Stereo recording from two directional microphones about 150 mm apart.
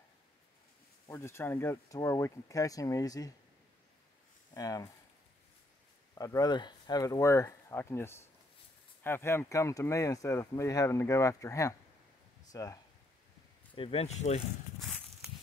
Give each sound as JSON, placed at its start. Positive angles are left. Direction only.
{"t": 1.0, "sound": "speech", "side_deg": 20}
{"t": 4.6, "sound": "speech", "side_deg": 25}
{"t": 6.1, "sound": "speech", "side_deg": 25}
{"t": 13.7, "sound": "speech", "side_deg": 40}